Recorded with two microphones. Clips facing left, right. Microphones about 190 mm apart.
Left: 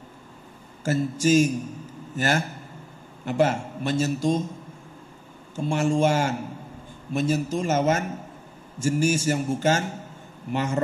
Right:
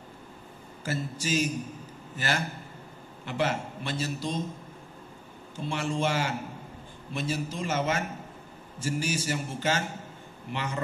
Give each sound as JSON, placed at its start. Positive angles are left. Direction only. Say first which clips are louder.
{"t": 0.8, "sound": "a man's voice", "louder": "left 10 dB", "side_deg": 45}
{"t": 5.6, "sound": "a man's voice", "louder": "left 8 dB", "side_deg": 45}